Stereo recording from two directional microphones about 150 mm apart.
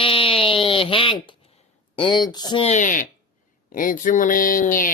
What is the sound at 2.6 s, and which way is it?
Speech, 55° left (ahead or behind).